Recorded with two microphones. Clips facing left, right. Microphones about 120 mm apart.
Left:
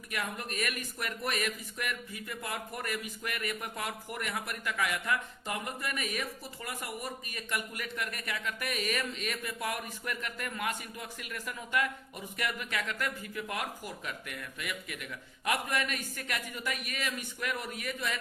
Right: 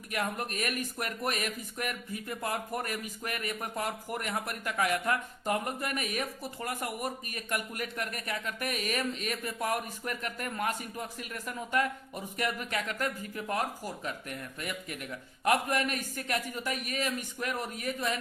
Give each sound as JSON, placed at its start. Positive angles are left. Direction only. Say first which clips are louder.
{"t": 0.1, "sound": "speech", "louder": "right 4 dB", "side_deg": -45}